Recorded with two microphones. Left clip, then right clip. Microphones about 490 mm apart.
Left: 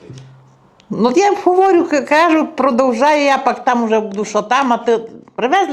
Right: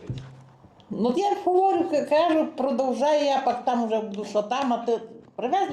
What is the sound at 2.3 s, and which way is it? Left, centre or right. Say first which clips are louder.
Speech: left 10 dB; left.